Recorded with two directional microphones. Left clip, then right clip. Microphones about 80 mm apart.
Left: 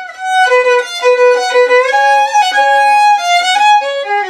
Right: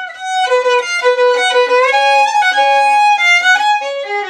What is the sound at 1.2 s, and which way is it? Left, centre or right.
Violin, left.